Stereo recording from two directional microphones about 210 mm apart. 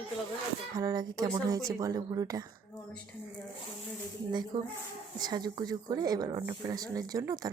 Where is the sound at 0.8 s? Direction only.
15° right (ahead or behind).